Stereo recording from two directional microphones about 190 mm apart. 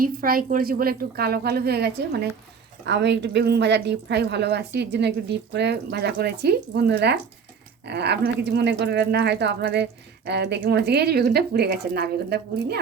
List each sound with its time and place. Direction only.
0.0 s a woman's voice: 50° right (ahead or behind)